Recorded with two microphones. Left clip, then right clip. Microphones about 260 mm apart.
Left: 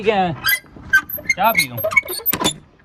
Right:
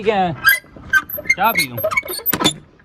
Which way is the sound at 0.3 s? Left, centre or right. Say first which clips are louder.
Right 5 dB; centre.